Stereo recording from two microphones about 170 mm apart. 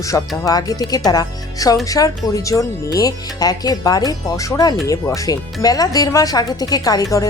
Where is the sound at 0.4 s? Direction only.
20° left (ahead or behind).